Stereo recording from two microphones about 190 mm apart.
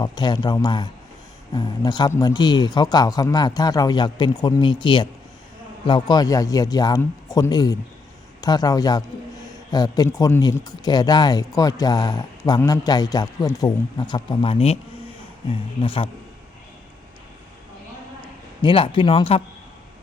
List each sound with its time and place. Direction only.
0.0 s a man's voice: 20° left (ahead or behind)
18.2 s a man's voice: 25° left (ahead or behind)